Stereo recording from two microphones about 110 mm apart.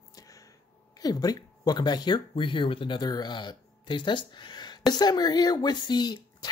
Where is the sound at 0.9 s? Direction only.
35° left (ahead or behind).